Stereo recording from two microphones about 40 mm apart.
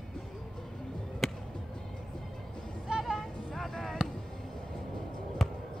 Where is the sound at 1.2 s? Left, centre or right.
Centre.